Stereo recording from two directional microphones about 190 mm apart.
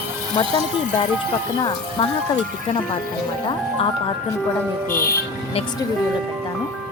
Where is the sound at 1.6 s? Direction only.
25° left (ahead or behind).